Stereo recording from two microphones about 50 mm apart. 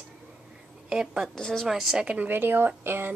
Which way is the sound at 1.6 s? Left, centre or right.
Centre.